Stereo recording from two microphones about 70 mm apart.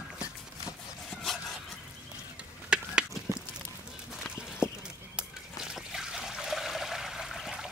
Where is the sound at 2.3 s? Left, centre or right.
Centre.